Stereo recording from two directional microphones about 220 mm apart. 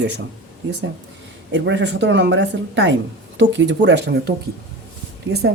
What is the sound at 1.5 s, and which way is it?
A woman's voice, 55° right (ahead or behind).